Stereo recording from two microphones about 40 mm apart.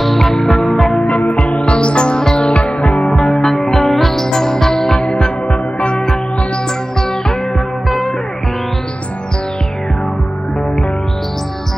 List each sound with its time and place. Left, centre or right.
0.0 s music: centre
1.0 s music: left
3.1 s music: centre